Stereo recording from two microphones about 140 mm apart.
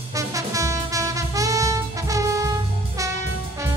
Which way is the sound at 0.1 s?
25° right (ahead or behind).